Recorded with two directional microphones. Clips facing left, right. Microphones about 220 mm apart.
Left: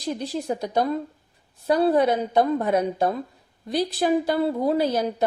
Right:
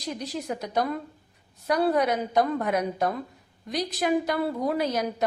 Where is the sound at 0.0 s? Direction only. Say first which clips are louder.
Left 5 dB; 30° left (ahead or behind).